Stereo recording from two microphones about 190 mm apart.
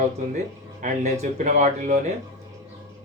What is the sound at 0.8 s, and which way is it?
Speech, 35° right (ahead or behind).